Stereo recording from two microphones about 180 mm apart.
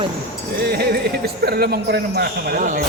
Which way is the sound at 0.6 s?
60° right (ahead or behind).